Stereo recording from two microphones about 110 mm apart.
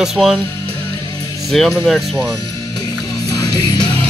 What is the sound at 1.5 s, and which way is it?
Speech, 5° left (ahead or behind).